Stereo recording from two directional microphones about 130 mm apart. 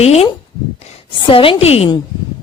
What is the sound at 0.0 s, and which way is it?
Speech, 50° left (ahead or behind).